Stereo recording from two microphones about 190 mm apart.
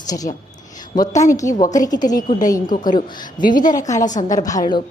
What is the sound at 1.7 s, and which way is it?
Speech, 20° left (ahead or behind).